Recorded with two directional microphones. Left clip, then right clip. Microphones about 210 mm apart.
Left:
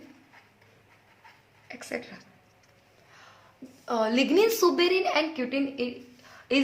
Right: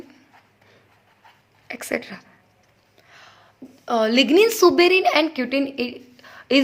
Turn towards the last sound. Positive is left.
turn(degrees=-40)  # may be behind; listen again after turning